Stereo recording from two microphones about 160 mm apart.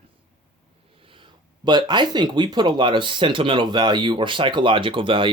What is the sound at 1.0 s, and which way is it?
Speech, 30° right (ahead or behind).